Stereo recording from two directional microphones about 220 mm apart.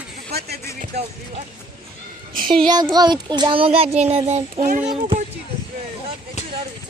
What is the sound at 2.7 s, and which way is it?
Speech, 20° right (ahead or behind).